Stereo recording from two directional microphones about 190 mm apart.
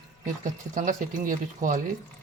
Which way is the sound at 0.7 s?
45° right (ahead or behind).